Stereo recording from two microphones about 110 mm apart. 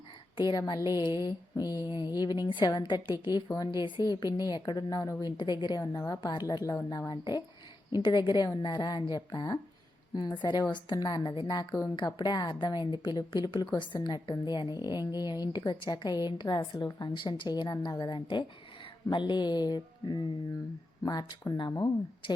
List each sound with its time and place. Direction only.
0.5 s a woman's voice: 35° left (ahead or behind)